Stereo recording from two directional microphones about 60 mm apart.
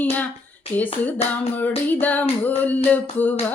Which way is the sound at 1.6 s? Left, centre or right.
Left.